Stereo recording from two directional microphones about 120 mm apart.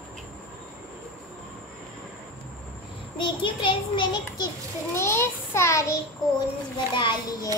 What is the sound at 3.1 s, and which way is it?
Child singing, 45° left (ahead or behind).